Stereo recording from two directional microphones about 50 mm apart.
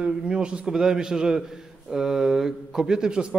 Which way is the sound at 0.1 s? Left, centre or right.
Centre.